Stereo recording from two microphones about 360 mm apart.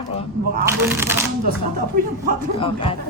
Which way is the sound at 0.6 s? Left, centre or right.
Centre.